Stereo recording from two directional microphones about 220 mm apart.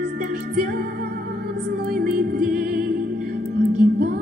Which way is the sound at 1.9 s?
45° right (ahead or behind).